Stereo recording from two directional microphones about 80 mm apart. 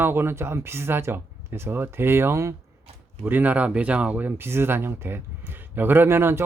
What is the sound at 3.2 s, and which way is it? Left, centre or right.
Speech, right.